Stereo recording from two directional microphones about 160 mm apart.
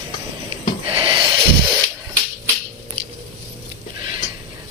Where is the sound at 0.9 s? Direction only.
30° right (ahead or behind).